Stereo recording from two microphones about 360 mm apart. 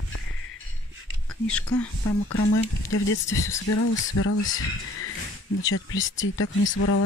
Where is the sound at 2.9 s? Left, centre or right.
Left.